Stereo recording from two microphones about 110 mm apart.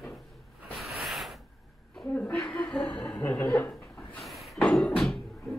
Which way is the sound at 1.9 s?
10° left (ahead or behind).